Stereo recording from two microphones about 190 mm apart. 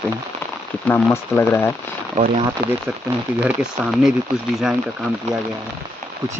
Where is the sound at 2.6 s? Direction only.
55° right (ahead or behind).